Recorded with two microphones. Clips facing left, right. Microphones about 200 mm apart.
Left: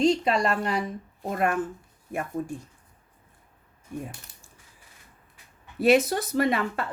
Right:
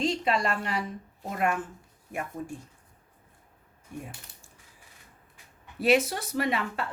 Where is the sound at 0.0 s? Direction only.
40° left (ahead or behind).